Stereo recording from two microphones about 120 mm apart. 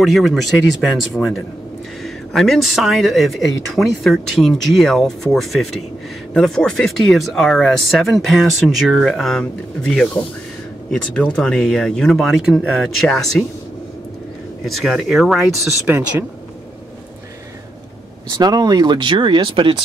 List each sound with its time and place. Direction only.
0.0 s speech: centre (ahead or behind)
14.7 s speech: centre (ahead or behind)
18.3 s speech: 35° right (ahead or behind)